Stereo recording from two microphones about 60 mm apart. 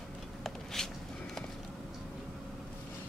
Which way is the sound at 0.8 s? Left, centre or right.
Centre.